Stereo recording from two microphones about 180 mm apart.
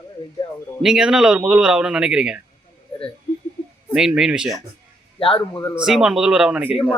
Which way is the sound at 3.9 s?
5° right (ahead or behind).